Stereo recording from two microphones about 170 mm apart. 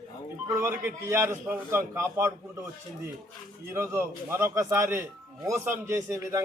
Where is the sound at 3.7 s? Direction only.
15° right (ahead or behind).